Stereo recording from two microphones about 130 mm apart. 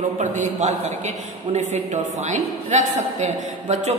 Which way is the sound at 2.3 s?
65° right (ahead or behind).